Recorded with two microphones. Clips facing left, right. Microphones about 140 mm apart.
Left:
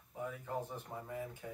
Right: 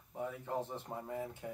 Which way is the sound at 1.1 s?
25° right (ahead or behind).